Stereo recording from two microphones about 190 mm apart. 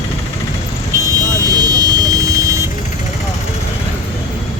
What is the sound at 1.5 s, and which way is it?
Buzzer, 20° right (ahead or behind).